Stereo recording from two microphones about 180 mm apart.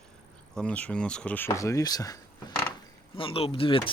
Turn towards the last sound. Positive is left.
turn(degrees=30)  # may be behind; listen again after turning